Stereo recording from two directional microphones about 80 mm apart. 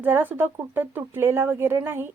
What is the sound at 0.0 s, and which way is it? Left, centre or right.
A woman's voice, right.